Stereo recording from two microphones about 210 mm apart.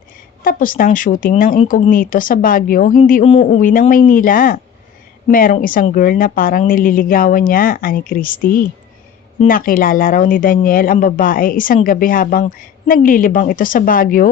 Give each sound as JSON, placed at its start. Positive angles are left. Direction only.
{"t": 0.4, "sound": "speech", "side_deg": 40}